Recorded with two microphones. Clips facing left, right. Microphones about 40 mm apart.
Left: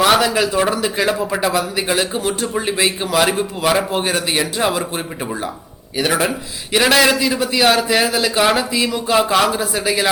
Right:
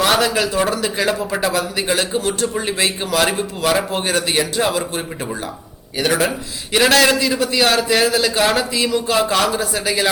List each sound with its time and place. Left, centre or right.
0.0 s a man's voice: centre